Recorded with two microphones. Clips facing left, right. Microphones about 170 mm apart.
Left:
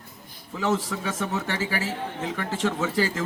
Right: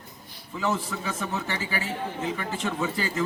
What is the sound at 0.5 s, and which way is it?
A man's voice, 80° left.